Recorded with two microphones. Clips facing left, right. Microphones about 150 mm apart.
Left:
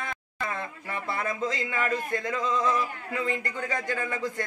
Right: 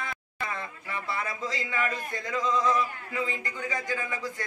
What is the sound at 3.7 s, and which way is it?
Speech, 60° left (ahead or behind).